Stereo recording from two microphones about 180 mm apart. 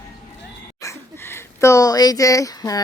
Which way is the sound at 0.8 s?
15° left (ahead or behind).